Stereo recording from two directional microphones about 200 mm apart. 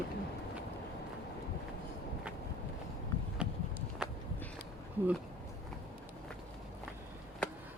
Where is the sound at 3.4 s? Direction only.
5° right (ahead or behind).